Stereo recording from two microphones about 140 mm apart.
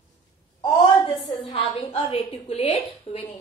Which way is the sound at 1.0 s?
40° left (ahead or behind).